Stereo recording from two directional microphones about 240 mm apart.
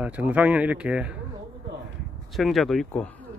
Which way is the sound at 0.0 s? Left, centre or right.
Centre.